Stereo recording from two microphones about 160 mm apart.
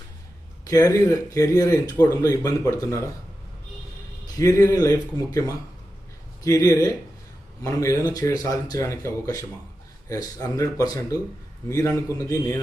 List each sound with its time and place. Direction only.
0.6 s speech: 20° left (ahead or behind)
4.4 s speech: 20° left (ahead or behind)
10.4 s speech: 20° left (ahead or behind)